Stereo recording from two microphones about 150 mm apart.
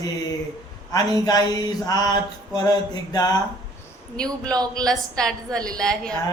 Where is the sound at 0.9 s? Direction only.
25° left (ahead or behind).